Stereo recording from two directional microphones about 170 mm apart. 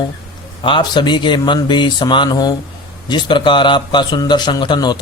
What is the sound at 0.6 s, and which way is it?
Speech, 30° left (ahead or behind).